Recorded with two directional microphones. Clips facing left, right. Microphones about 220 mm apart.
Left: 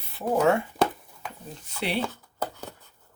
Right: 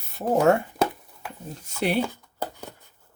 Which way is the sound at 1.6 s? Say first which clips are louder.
Right 5 dB; 45° right (ahead or behind).